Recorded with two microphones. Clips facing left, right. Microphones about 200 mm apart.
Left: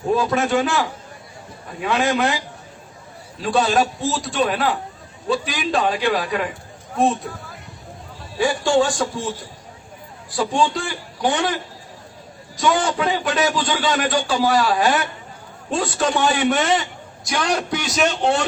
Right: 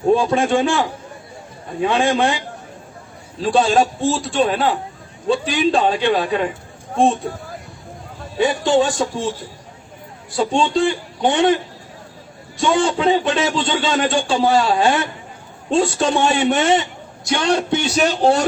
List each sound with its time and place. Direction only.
0.1 s a man's voice: 25° right (ahead or behind)
3.4 s a man's voice: 30° right (ahead or behind)
8.4 s a man's voice: 20° right (ahead or behind)
10.3 s a man's voice: 25° right (ahead or behind)